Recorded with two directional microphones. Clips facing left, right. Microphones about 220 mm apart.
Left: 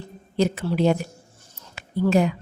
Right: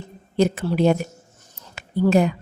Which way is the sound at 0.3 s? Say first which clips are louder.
Right 2 dB; 50° right (ahead or behind).